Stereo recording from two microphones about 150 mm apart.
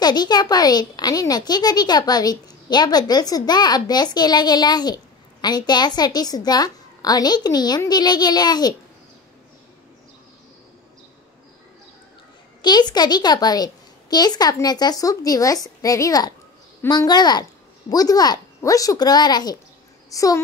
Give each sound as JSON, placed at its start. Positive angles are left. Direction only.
{"t": 0.0, "sound": "a child's voice", "side_deg": 30}
{"t": 12.6, "sound": "a child's voice", "side_deg": 30}